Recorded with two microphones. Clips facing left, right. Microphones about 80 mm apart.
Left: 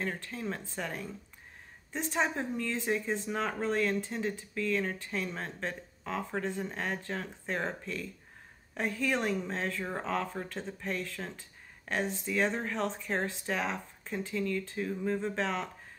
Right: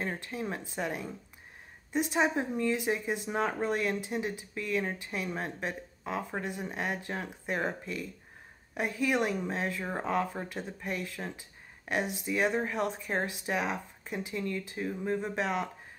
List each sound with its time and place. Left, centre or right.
0.0 s speech: centre